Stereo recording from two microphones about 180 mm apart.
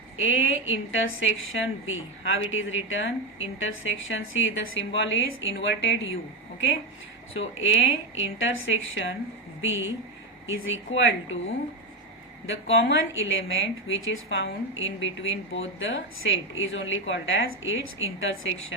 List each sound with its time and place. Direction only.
0.2 s a woman's voice: 90° left
7.3 s a woman's voice: 90° left